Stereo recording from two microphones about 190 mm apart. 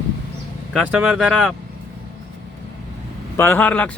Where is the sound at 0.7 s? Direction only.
5° right (ahead or behind).